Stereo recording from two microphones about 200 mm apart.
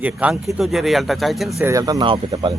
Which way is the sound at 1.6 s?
15° right (ahead or behind).